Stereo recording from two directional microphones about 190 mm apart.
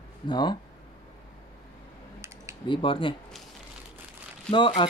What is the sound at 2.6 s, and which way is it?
Speech, 25° left (ahead or behind).